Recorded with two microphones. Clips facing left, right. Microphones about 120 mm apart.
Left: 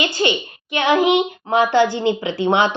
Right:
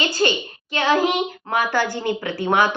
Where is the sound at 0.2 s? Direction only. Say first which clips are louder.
Left 1 dB; 20° left (ahead or behind).